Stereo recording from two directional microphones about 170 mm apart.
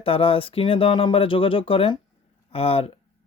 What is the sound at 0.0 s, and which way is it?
Speech, 35° left (ahead or behind).